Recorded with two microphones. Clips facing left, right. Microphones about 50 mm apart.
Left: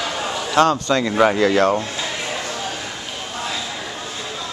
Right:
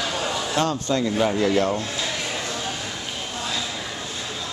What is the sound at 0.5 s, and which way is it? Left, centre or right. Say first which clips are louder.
Speech: left 8 dB; left.